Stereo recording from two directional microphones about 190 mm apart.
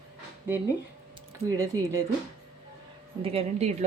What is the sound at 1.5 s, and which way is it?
Speech, 15° right (ahead or behind).